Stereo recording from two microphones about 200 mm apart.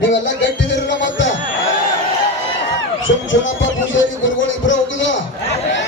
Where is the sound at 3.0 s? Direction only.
70° left (ahead or behind).